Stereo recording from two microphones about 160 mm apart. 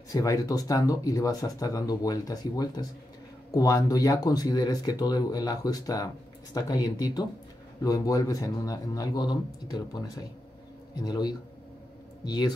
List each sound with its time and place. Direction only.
0.1 s speech: 20° left (ahead or behind)